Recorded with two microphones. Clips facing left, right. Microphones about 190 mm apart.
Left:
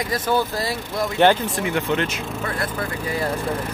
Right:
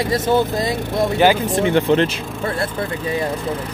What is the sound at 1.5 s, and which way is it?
Speech, 30° right (ahead or behind).